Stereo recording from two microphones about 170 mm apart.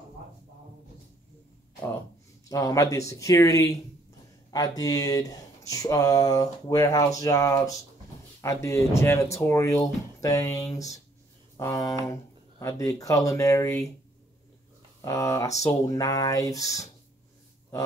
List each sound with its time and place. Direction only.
2.5 s speech: 20° left (ahead or behind)
15.0 s speech: 20° left (ahead or behind)